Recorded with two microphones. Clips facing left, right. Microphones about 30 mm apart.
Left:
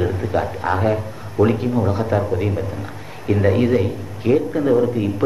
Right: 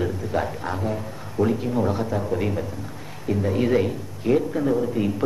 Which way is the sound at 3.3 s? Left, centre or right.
Left.